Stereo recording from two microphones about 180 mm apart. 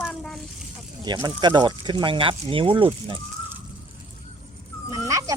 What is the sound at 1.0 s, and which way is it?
Speech, 25° right (ahead or behind).